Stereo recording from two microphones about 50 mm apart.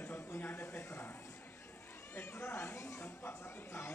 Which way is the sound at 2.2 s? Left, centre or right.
Left.